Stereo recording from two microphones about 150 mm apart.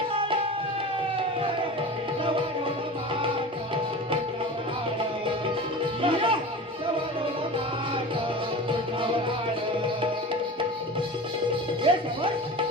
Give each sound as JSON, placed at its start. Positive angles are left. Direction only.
{"t": 6.0, "sound": "music", "side_deg": -35}
{"t": 8.7, "sound": "music", "side_deg": -35}
{"t": 11.8, "sound": "music", "side_deg": -35}